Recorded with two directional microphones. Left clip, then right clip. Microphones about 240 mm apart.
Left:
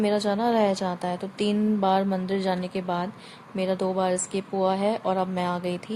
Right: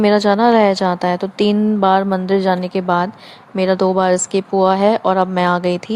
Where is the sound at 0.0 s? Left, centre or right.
Right.